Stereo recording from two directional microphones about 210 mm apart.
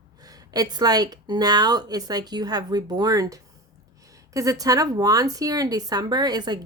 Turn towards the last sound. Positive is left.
turn(degrees=-20)  # may be behind; listen again after turning